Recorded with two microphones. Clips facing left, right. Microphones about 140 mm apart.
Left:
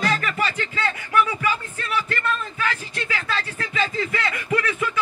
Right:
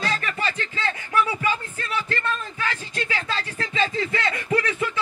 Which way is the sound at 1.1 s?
30° right (ahead or behind).